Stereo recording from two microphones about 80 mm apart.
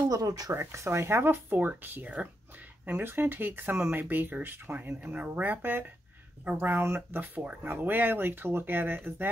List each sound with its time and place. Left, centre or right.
0.1 s speech: right
0.6 s speech: right